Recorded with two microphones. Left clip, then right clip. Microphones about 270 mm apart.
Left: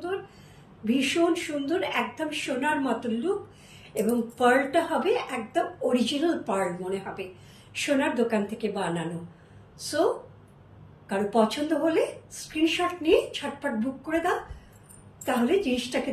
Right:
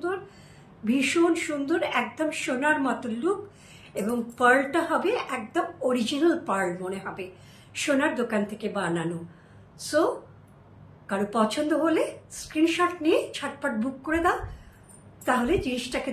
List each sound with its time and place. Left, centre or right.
0.8 s a woman's voice: centre
4.4 s a woman's voice: centre
11.1 s a woman's voice: centre